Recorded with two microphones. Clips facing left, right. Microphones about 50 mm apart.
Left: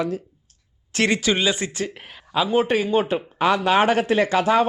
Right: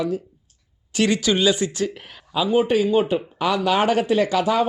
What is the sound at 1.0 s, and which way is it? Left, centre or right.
Speech, left.